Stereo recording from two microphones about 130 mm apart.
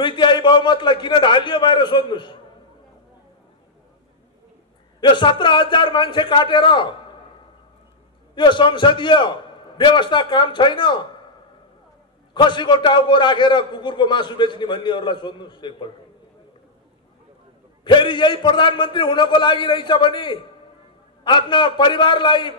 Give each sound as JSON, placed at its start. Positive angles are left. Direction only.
{"t": 0.0, "sound": "a man's voice", "side_deg": 35}
{"t": 5.0, "sound": "a man's voice", "side_deg": 40}
{"t": 8.4, "sound": "a man's voice", "side_deg": 35}
{"t": 12.4, "sound": "a man's voice", "side_deg": 35}
{"t": 17.8, "sound": "a man's voice", "side_deg": 40}